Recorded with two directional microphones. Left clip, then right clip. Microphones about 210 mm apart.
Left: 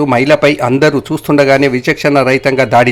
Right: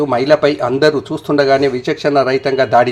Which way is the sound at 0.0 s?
35° left (ahead or behind).